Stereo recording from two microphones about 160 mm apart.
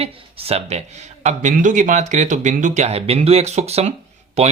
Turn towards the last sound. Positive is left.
turn(degrees=-40)  # may be behind; listen again after turning